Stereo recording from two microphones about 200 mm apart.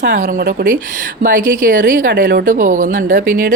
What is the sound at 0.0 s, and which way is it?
Speech, 55° right (ahead or behind).